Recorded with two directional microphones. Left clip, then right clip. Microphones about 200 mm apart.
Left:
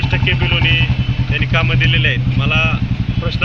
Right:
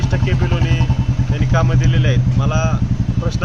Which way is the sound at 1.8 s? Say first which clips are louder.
Left 7 dB; 70° right (ahead or behind).